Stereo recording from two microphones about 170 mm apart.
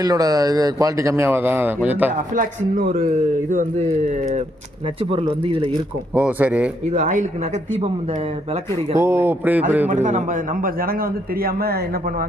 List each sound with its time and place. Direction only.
0.0 s speech: 20° right (ahead or behind)
2.3 s speech: 50° right (ahead or behind)
5.5 s speech: 30° right (ahead or behind)
6.1 s speech: 10° right (ahead or behind)
6.9 s speech: 45° right (ahead or behind)
9.0 s speech: 15° right (ahead or behind)
9.9 s a man's voice: 45° right (ahead or behind); by 11.8 s 60° right (ahead or behind)